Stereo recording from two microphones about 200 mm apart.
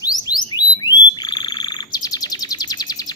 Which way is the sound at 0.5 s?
20° left (ahead or behind).